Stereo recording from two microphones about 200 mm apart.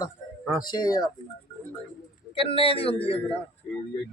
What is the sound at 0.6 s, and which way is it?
Speech, 20° left (ahead or behind).